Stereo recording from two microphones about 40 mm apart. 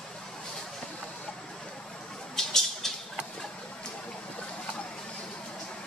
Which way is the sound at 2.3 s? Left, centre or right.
Centre.